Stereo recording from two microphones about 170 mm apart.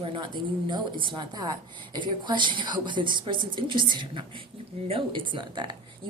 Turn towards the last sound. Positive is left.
turn(degrees=-30)  # may be behind; listen again after turning